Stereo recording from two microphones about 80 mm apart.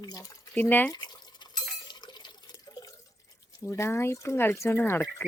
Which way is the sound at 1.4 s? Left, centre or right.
Left.